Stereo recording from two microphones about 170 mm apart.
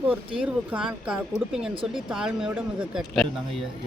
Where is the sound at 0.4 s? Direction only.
5° right (ahead or behind).